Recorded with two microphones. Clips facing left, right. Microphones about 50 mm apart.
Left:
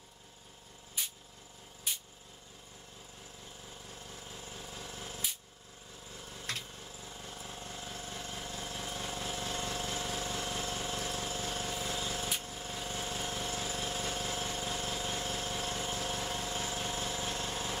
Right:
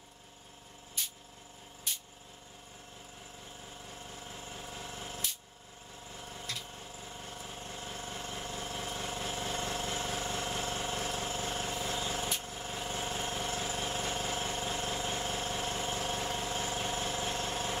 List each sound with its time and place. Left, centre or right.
1.0 s vehicle: centre
1.9 s a sound: centre
4.1 s vehicle: right
7.0 s vehicle: right
7.8 s vehicle: right